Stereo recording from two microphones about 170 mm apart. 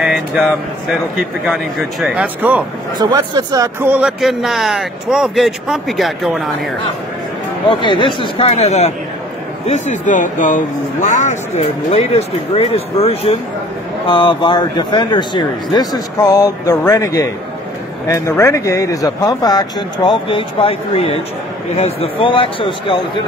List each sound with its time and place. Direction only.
0.0 s a man's voice: 5° right (ahead or behind)
3.0 s speech: 25° right (ahead or behind)
3.9 s a man's voice: 5° right (ahead or behind)
7.6 s speech: 30° left (ahead or behind)